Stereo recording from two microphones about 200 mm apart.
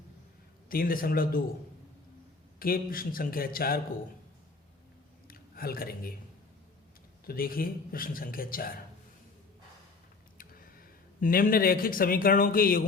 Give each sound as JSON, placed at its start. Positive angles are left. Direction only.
{"t": 0.7, "sound": "speech", "side_deg": 45}
{"t": 2.6, "sound": "speech", "side_deg": 45}
{"t": 5.3, "sound": "speech", "side_deg": 45}
{"t": 7.3, "sound": "speech", "side_deg": 45}
{"t": 10.3, "sound": "speech", "side_deg": 45}